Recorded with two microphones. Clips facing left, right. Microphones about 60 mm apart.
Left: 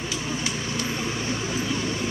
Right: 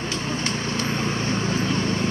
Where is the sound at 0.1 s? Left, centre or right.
Right.